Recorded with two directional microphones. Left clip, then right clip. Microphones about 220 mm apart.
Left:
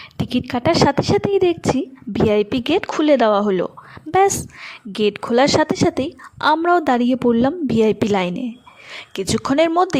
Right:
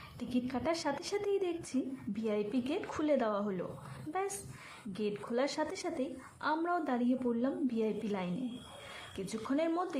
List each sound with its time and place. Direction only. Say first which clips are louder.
0.2 s a woman's voice: left 15 dB; 40° left (ahead or behind)
4.9 s a woman's voice: left 19 dB; 45° left (ahead or behind)